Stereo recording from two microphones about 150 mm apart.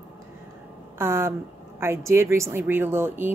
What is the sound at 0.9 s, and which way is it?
A woman's voice, 15° right (ahead or behind).